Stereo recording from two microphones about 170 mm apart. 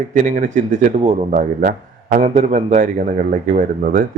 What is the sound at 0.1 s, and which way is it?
Speech, 45° right (ahead or behind).